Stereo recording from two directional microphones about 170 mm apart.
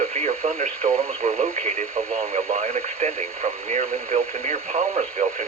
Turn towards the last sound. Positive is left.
turn(degrees=-40)  # may be behind; listen again after turning